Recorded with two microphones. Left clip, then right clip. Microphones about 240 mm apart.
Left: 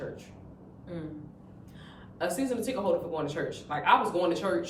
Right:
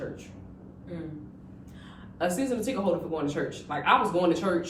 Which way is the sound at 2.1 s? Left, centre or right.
Centre.